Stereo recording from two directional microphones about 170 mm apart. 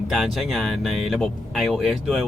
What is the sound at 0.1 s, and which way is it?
Speech, centre (ahead or behind).